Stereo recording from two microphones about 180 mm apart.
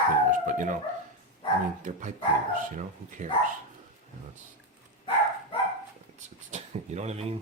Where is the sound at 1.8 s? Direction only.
45° right (ahead or behind).